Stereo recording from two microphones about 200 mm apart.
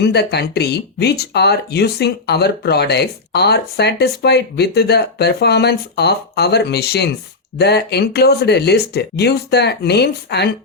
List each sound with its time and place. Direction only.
0.0 s speech: 55° left (ahead or behind)